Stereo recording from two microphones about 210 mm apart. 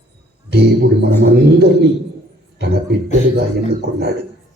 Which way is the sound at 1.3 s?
50° right (ahead or behind).